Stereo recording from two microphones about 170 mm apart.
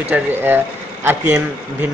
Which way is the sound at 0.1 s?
10° right (ahead or behind).